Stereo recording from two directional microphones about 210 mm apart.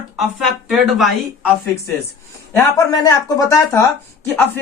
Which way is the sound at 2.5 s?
15° left (ahead or behind).